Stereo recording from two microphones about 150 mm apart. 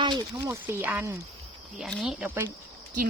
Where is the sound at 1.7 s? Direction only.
Centre (ahead or behind).